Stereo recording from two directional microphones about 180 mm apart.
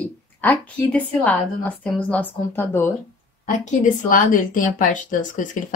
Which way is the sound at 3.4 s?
45° left (ahead or behind).